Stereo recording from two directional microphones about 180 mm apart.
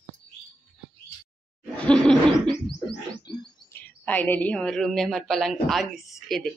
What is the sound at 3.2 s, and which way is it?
Bird, 25° left (ahead or behind).